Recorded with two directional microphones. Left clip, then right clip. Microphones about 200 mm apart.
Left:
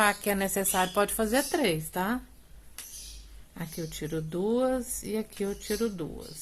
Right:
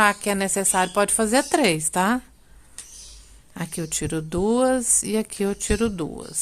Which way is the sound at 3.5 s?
45° right (ahead or behind).